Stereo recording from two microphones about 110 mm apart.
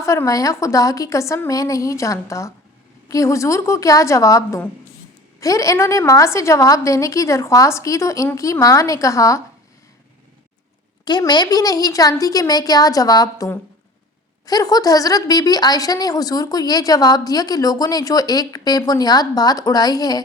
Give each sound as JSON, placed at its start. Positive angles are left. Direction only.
{"t": 0.0, "sound": "a woman's voice", "side_deg": 25}
{"t": 11.0, "sound": "a woman's voice", "side_deg": 40}